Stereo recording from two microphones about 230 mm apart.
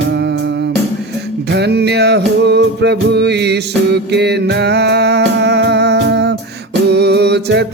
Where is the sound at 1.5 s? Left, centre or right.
Right.